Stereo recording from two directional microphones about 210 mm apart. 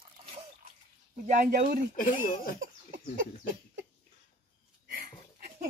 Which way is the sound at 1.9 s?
40° left (ahead or behind).